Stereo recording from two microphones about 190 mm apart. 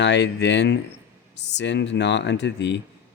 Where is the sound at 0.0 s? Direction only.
65° left (ahead or behind).